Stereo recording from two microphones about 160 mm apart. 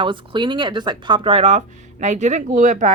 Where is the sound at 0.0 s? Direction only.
30° right (ahead or behind).